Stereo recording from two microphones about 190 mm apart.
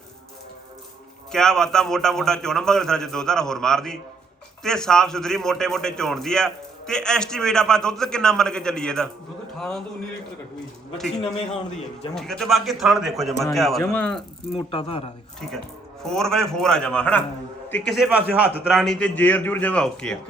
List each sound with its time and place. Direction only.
1.3 s a man's voice: 5° left (ahead or behind)
12.1 s a man's voice: centre (ahead or behind)
14.5 s speech: 30° left (ahead or behind)
16.0 s a man's voice: centre (ahead or behind)
17.9 s a man's voice: 5° right (ahead or behind)
18.8 s a man's voice: 5° left (ahead or behind)